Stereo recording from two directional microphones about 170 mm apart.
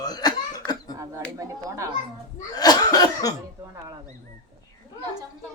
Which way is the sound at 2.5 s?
25° left (ahead or behind).